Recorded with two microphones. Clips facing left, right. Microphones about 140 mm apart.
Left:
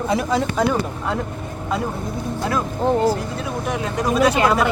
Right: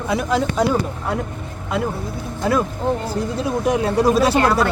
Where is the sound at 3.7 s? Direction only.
35° right (ahead or behind).